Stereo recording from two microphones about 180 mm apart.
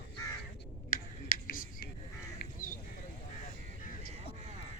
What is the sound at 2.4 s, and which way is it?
Crow, 50° left (ahead or behind).